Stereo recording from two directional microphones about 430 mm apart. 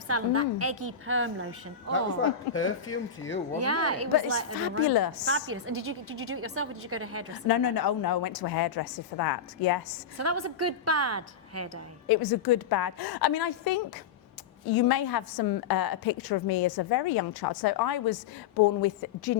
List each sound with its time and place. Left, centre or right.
0.1 s a woman's voice: right
2.5 s speech: left
3.5 s a woman's voice: right
7.4 s a woman's voice: left
10.2 s a woman's voice: right
12.0 s a woman's voice: left
14.8 s a woman's voice: left